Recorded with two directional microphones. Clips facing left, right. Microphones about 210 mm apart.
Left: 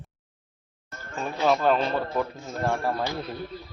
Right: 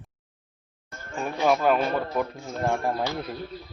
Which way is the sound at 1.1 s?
10° right (ahead or behind).